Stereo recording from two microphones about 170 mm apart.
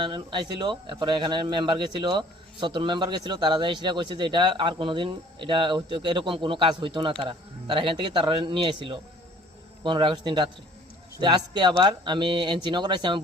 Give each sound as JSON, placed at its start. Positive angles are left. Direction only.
{"t": 0.0, "sound": "speech", "side_deg": -30}